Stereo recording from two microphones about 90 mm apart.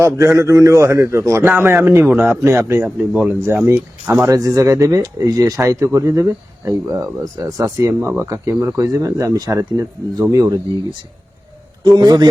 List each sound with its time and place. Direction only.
0.0 s a man's voice: 35° right (ahead or behind); by 3.3 s 15° right (ahead or behind)
3.7 s a man's voice: 30° right (ahead or behind)
8.8 s speech: 40° right (ahead or behind)
11.8 s a man's voice: 55° right (ahead or behind)